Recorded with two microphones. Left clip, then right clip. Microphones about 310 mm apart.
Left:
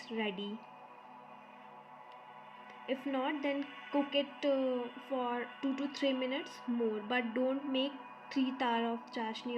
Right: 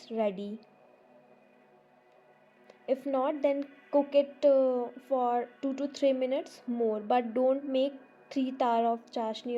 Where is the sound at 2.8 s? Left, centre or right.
Right.